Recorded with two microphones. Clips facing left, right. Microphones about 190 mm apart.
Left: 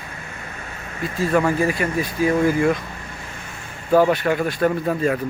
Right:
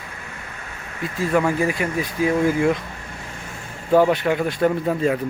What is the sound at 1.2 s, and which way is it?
Speech, 10° right (ahead or behind).